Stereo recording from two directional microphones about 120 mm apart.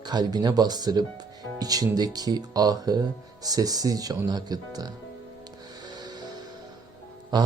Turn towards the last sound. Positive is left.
turn(degrees=-35)  # may be behind; listen again after turning